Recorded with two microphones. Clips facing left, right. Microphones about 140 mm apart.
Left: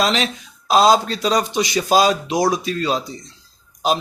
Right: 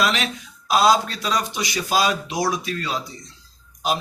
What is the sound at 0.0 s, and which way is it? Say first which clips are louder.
Speech: left 3 dB; 25° left (ahead or behind).